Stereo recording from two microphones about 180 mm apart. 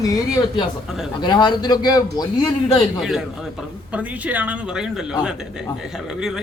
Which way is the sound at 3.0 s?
Centre (ahead or behind).